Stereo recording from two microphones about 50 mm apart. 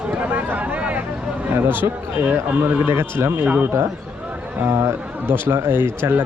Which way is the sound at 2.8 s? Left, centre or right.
Right.